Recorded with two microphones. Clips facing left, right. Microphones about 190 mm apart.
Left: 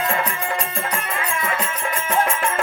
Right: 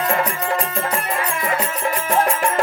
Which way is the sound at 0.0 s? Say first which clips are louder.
Right 3 dB; 40° right (ahead or behind).